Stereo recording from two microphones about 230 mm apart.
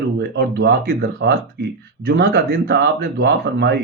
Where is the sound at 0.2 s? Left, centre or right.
Right.